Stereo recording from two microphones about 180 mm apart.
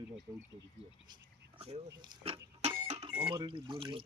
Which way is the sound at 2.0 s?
30° right (ahead or behind).